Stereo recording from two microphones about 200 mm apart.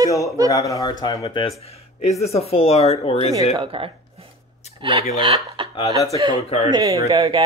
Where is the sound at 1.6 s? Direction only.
30° left (ahead or behind).